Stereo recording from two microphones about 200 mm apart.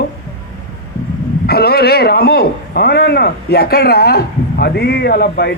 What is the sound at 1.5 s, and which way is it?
A man's voice, 50° left (ahead or behind).